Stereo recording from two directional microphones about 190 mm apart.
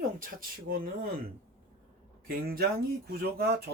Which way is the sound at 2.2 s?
50° right (ahead or behind).